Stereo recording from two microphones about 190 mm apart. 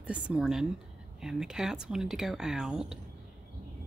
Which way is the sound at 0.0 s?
5° right (ahead or behind).